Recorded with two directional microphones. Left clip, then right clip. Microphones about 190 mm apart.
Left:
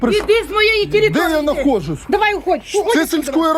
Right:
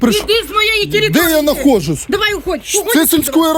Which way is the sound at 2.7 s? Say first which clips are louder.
Right 5 dB; 60° right (ahead or behind).